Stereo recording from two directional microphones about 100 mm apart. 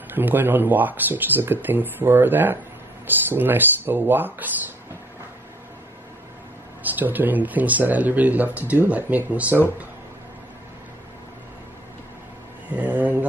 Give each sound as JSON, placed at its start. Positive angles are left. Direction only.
{"t": 0.1, "sound": "speech", "side_deg": -20}
{"t": 6.8, "sound": "speech", "side_deg": -15}
{"t": 12.7, "sound": "speech", "side_deg": -15}